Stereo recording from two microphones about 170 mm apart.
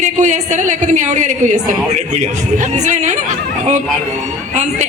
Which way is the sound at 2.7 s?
45° right (ahead or behind).